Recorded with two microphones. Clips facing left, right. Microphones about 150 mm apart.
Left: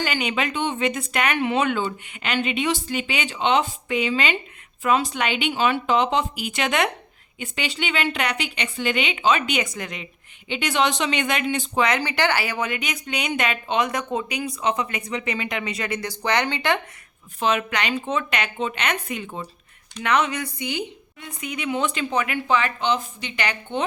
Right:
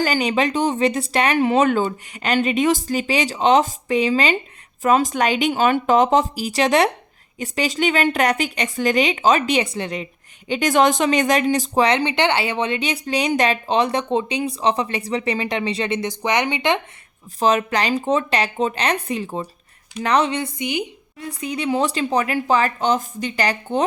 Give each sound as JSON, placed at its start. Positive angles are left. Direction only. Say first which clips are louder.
{"t": 0.0, "sound": "speech", "louder": "right 6 dB", "side_deg": -40}
{"t": 10.5, "sound": "speech", "louder": "right 6 dB", "side_deg": -45}
{"t": 17.4, "sound": "speech", "louder": "right 5 dB", "side_deg": -40}
{"t": 21.2, "sound": "speech", "louder": "right 6 dB", "side_deg": -35}